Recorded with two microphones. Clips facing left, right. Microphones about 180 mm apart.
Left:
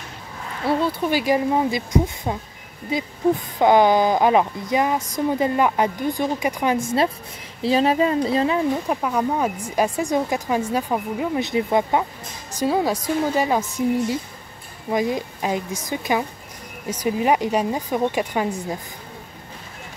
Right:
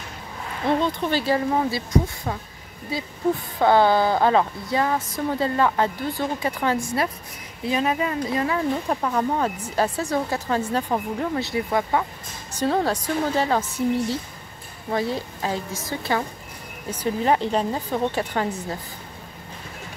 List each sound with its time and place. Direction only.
0.7 s speech: 5° left (ahead or behind)
3.5 s speech: 15° left (ahead or behind)
8.8 s speech: 10° left (ahead or behind)
11.4 s speech: 20° left (ahead or behind)
14.9 s speech: 15° left (ahead or behind)